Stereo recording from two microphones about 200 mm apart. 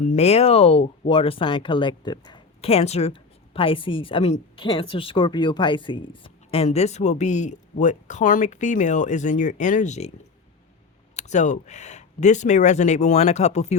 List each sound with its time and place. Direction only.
0.0 s speech: 35° left (ahead or behind)
11.2 s speech: 35° left (ahead or behind)